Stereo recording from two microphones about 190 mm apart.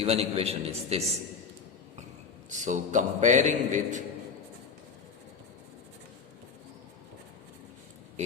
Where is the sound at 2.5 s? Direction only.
40° right (ahead or behind).